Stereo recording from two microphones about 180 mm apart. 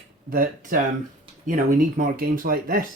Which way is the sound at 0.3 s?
50° right (ahead or behind).